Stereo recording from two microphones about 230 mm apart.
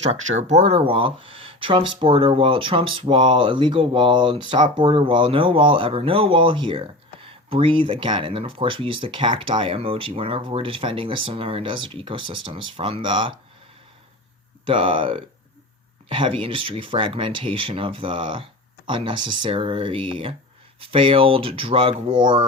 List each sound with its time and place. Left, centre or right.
0.4 s speech: right
14.6 s speech: right